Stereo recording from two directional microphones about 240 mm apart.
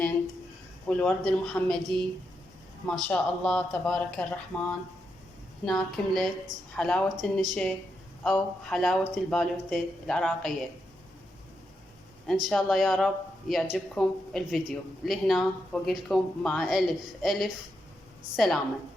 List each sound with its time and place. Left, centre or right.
0.9 s speech: centre
12.3 s speech: centre